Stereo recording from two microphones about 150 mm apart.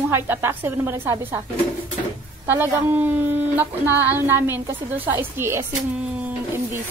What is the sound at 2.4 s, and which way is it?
Speech, 15° right (ahead or behind).